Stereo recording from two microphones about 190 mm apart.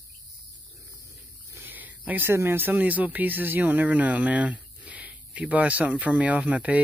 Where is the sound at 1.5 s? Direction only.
10° right (ahead or behind).